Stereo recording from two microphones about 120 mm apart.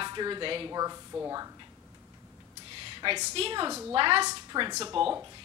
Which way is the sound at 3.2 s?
55° right (ahead or behind).